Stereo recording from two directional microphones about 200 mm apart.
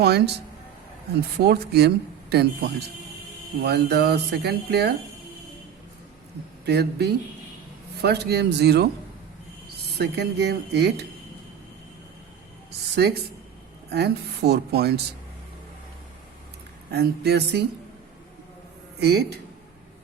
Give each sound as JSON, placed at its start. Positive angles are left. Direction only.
{"t": 0.0, "sound": "speech", "side_deg": -55}
{"t": 1.4, "sound": "speech", "side_deg": -55}
{"t": 6.7, "sound": "speech", "side_deg": -55}
{"t": 10.0, "sound": "speech", "side_deg": -55}
{"t": 13.0, "sound": "speech", "side_deg": -55}
{"t": 16.9, "sound": "speech", "side_deg": -55}
{"t": 18.9, "sound": "speech", "side_deg": -55}